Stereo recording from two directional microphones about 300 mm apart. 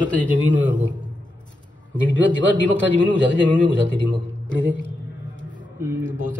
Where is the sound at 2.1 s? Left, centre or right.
Left.